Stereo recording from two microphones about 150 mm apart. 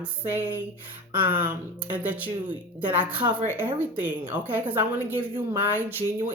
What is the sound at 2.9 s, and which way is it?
A woman's voice, 10° right (ahead or behind).